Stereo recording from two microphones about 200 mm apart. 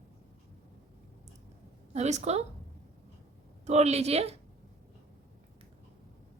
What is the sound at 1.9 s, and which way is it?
Speech, 35° right (ahead or behind).